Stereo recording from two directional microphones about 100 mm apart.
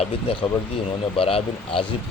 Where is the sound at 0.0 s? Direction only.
70° left (ahead or behind).